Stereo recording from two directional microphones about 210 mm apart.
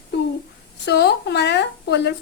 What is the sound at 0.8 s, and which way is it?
A woman's voice, 50° left (ahead or behind).